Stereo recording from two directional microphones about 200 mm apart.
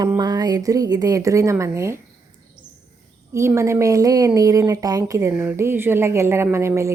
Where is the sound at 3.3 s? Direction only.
15° right (ahead or behind).